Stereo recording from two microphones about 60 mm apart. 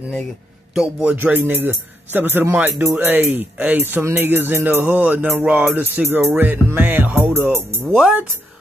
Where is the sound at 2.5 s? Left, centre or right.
Right.